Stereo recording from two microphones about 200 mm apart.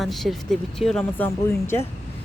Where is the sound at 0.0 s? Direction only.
Centre (ahead or behind).